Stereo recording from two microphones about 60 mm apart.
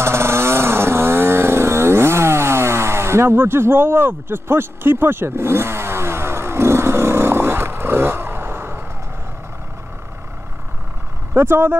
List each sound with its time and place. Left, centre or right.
0.0 s chainsaw: right
11.3 s speech: right